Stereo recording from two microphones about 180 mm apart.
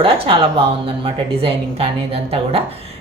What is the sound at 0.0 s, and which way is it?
A woman's voice, 30° right (ahead or behind).